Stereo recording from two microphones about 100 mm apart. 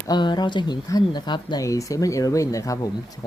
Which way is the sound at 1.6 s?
35° left (ahead or behind).